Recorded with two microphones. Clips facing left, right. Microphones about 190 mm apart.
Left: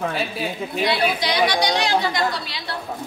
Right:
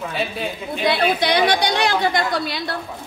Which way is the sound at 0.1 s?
Centre (ahead or behind).